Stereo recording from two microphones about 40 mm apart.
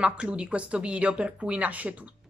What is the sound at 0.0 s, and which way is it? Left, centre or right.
Speech, right.